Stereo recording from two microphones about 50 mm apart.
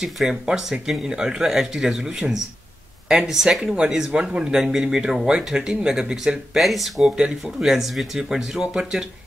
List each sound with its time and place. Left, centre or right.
0.0 s speech: centre
7.1 s speech: centre